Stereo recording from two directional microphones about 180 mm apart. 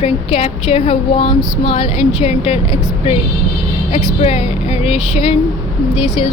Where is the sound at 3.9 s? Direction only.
35° left (ahead or behind).